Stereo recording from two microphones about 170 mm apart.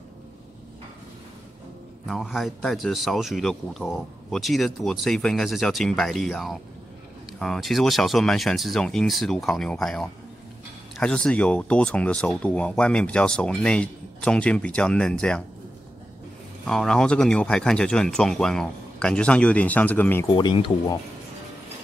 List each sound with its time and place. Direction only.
2.0 s speech: centre (ahead or behind)
16.6 s speech: 5° left (ahead or behind)
20.2 s speech: 25° left (ahead or behind)